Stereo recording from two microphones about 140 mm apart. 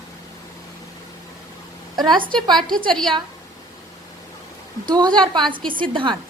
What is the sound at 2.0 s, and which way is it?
Speech, 35° right (ahead or behind).